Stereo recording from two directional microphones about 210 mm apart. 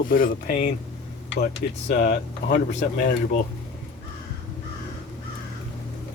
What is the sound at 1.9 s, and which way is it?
Speech, 35° left (ahead or behind).